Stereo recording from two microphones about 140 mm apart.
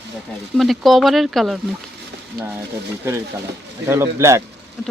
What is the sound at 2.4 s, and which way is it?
Speech, 90° right.